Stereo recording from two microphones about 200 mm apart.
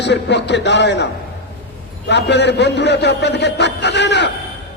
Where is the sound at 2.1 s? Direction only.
60° left (ahead or behind).